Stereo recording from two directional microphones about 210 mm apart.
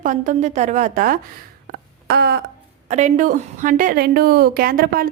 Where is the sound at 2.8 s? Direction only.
35° right (ahead or behind).